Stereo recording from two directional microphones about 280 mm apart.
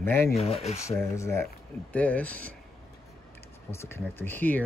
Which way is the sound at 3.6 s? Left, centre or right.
Centre.